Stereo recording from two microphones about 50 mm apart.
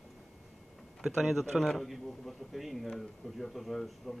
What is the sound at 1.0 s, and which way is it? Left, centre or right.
Speech, centre.